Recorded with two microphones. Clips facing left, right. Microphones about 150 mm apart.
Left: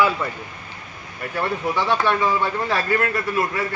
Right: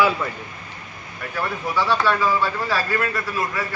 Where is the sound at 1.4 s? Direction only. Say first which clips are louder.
Left 1 dB; 20° left (ahead or behind).